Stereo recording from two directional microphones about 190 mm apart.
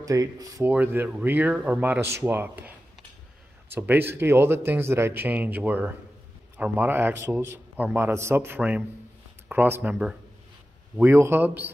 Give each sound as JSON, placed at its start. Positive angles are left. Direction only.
{"t": 0.0, "sound": "speech", "side_deg": -20}
{"t": 3.7, "sound": "speech", "side_deg": -10}